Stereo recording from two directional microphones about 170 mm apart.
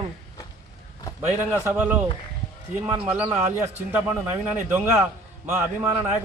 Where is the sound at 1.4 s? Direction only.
15° right (ahead or behind).